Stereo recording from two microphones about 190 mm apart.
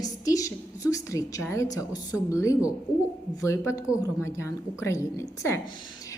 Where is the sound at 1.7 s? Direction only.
20° left (ahead or behind).